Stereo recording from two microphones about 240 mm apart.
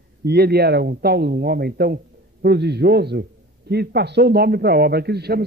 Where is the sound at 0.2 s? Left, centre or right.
Right.